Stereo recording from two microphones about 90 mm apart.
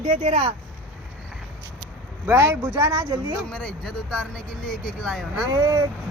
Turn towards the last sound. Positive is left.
turn(degrees=-45)  # may be behind; listen again after turning